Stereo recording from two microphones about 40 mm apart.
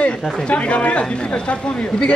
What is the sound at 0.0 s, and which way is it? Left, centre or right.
Speech, left.